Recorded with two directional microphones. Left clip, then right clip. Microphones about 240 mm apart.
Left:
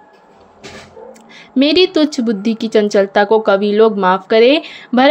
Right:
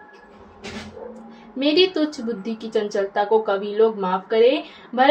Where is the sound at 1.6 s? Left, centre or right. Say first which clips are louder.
Left 7 dB; left.